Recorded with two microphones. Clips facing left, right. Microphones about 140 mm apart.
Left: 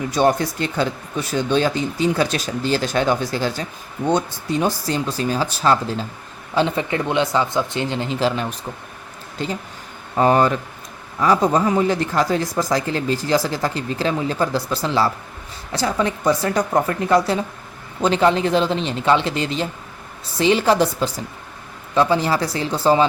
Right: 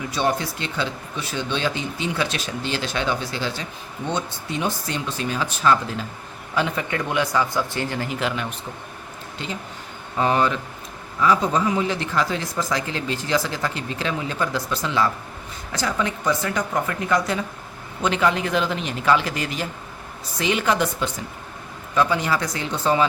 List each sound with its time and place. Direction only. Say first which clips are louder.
0.1 s speech: left 6 dB; 45° left (ahead or behind)
10.2 s speech: left 5 dB; 40° left (ahead or behind)